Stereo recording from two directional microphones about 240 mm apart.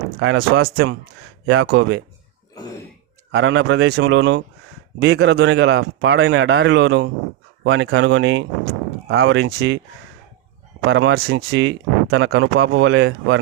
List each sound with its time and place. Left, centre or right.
0.2 s speech: right
3.3 s speech: right
10.8 s speech: right